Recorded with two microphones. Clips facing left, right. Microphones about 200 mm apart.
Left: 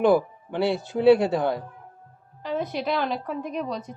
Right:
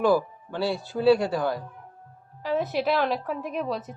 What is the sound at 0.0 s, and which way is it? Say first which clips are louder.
Speech: left 2 dB; 20° left (ahead or behind).